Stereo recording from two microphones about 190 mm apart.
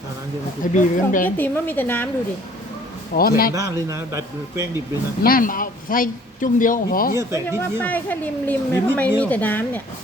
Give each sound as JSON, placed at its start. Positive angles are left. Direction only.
{"t": 0.7, "sound": "speech", "side_deg": 45}
{"t": 1.4, "sound": "speech", "side_deg": 10}
{"t": 3.2, "sound": "speech", "side_deg": 50}
{"t": 3.5, "sound": "a man's voice", "side_deg": -15}
{"t": 5.2, "sound": "speech", "side_deg": 50}
{"t": 7.2, "sound": "a man's voice", "side_deg": -15}
{"t": 7.6, "sound": "speech", "side_deg": 10}